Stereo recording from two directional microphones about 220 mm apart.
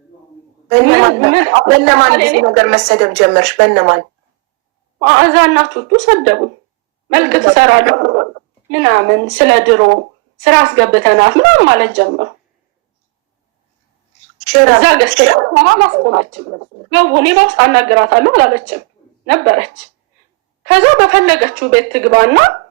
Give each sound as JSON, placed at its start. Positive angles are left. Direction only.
{"t": 0.7, "sound": "a woman's voice", "side_deg": -50}
{"t": 14.6, "sound": "a woman's voice", "side_deg": -50}